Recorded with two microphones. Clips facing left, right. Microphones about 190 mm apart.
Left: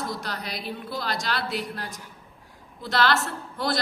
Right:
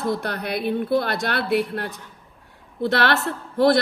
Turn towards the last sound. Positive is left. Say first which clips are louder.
# right 10 dB
turn(degrees=-60)  # may be behind; listen again after turning